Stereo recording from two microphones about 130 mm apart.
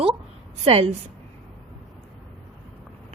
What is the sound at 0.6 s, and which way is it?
Speech, 50° right (ahead or behind).